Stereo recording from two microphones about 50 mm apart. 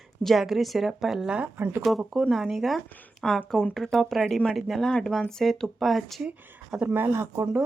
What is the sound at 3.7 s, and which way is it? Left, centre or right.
Speech, centre.